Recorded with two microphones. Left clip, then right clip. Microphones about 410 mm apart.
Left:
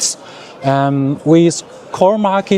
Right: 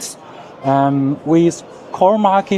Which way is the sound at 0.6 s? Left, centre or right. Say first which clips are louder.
Even; left.